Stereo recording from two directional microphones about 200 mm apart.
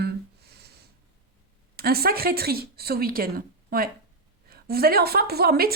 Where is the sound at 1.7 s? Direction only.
50° right (ahead or behind).